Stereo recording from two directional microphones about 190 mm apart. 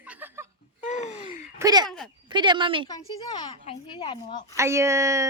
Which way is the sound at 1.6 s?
20° right (ahead or behind).